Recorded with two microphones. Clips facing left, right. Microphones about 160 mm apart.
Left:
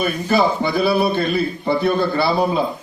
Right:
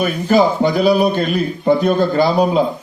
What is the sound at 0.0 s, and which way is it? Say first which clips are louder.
Speech: right 4 dB; 15° right (ahead or behind).